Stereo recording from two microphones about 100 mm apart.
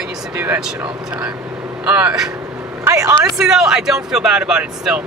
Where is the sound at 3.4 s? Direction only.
5° right (ahead or behind).